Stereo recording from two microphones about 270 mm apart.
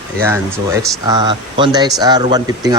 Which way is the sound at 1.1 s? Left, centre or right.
Centre.